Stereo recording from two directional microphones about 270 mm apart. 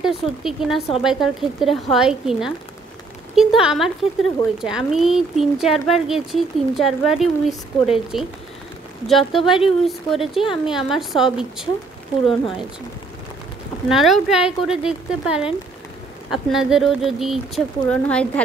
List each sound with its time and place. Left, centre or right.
0.0 s speech: centre
13.8 s speech: centre